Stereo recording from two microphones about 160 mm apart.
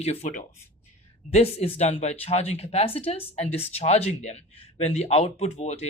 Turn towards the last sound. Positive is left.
turn(degrees=45)  # may be behind; listen again after turning